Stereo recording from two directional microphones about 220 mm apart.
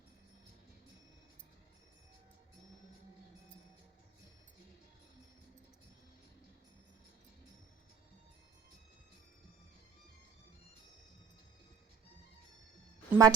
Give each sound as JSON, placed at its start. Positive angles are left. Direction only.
{"t": 13.1, "sound": "a woman's voice", "side_deg": -15}